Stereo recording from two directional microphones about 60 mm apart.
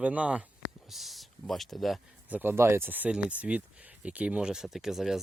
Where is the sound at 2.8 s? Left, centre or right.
Right.